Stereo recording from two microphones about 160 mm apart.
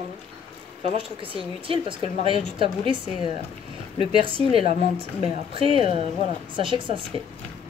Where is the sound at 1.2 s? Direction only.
35° right (ahead or behind).